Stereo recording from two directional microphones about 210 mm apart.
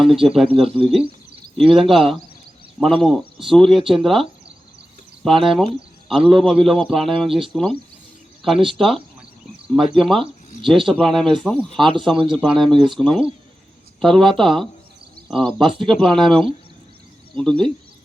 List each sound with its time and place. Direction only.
0.0 s a man's voice: centre (ahead or behind)
0.6 s speech: 30° right (ahead or behind)
0.9 s a man's voice: centre (ahead or behind)
9.6 s a man's voice: centre (ahead or behind)